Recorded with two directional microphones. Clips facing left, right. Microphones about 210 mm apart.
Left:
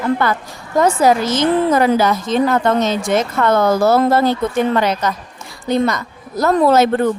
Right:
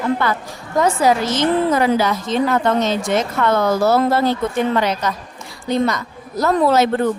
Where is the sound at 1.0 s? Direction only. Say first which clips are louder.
Left 2 dB; 45° left (ahead or behind).